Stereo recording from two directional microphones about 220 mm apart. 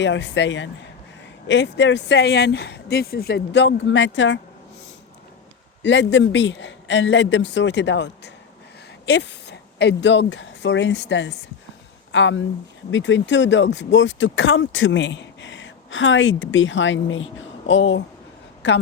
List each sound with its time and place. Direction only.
0.0 s speech: 55° left (ahead or behind)
5.8 s speech: 55° left (ahead or behind)